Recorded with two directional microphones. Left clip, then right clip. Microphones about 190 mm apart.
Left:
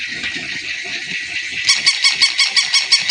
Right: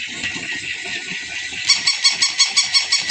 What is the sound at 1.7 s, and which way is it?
Honk, 5° left (ahead or behind).